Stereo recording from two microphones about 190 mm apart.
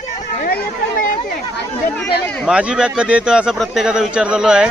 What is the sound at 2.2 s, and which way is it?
Speech, 5° left (ahead or behind).